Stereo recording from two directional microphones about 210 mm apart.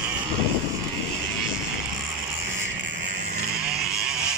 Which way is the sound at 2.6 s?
55° right (ahead or behind).